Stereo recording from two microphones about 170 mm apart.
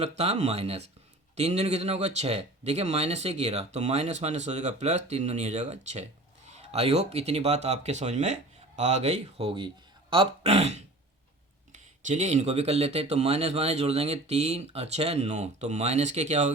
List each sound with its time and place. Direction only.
0.0 s speech: 40° right (ahead or behind)